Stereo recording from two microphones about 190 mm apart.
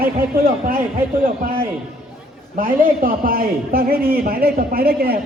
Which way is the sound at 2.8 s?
50° right (ahead or behind).